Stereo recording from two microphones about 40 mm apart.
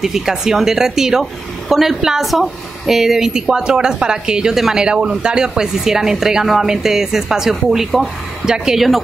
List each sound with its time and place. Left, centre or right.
0.0 s a woman's voice: centre